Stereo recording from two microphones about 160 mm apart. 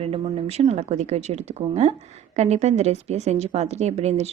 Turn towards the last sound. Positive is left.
turn(degrees=-40)  # may be behind; listen again after turning